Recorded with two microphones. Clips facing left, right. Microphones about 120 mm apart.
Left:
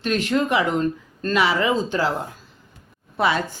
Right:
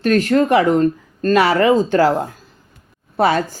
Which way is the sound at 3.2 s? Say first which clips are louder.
Right 5 dB; 45° right (ahead or behind).